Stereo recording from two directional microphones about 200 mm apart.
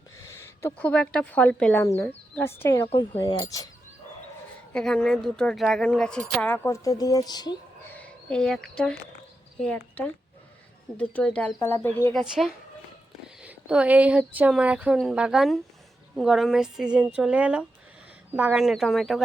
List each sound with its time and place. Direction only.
0.2 s speech: 15° left (ahead or behind)
2.8 s speech: 30° left (ahead or behind)
4.7 s speech: 5° left (ahead or behind); by 7.5 s 20° left (ahead or behind)
7.9 s a sound: 5° left (ahead or behind)
9.6 s speech: 5° left (ahead or behind)
12.2 s speech: 5° right (ahead or behind)